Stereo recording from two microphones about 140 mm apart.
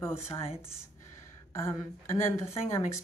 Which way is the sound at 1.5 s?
20° left (ahead or behind).